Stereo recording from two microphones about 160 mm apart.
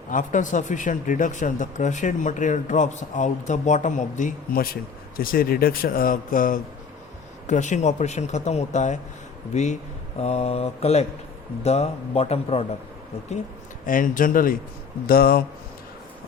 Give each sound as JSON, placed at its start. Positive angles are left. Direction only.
{"t": 0.1, "sound": "a man's voice", "side_deg": 55}
{"t": 13.8, "sound": "a man's voice", "side_deg": 55}